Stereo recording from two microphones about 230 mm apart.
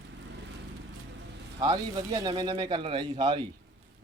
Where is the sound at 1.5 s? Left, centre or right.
Centre.